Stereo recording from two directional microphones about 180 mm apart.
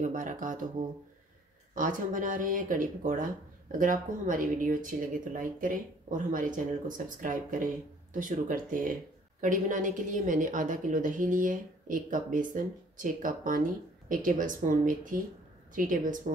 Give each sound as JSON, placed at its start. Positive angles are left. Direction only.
{"t": 0.0, "sound": "speech", "side_deg": -45}